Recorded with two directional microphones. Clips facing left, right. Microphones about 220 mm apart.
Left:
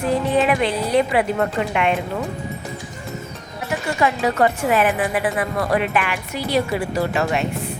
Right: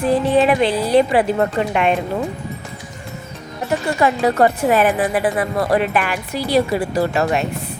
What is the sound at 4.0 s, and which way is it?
A woman's voice, 35° right (ahead or behind).